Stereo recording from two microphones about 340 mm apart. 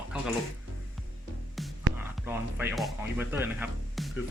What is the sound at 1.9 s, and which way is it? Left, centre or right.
Music, right.